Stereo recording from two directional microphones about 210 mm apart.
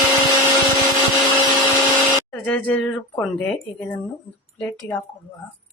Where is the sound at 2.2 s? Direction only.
5° left (ahead or behind).